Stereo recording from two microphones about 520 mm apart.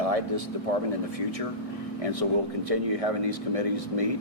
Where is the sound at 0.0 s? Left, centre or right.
Right.